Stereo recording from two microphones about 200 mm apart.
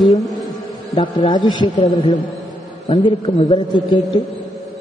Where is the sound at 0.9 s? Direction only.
20° left (ahead or behind).